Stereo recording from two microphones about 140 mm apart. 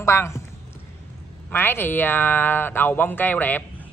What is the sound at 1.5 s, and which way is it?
Speech, 15° left (ahead or behind).